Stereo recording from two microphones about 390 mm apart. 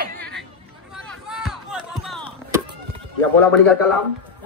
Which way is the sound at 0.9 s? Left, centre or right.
Centre.